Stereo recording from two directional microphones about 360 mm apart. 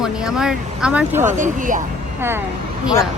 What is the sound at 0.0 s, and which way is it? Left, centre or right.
A woman's voice, centre.